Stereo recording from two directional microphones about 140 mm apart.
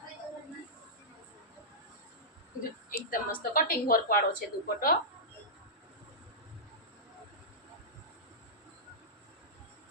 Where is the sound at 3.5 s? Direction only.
90° left.